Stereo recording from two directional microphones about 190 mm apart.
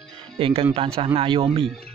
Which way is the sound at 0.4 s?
30° right (ahead or behind).